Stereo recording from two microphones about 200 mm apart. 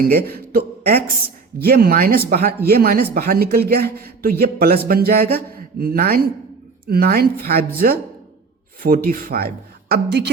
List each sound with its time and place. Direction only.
0.1 s speech: 50° right (ahead or behind)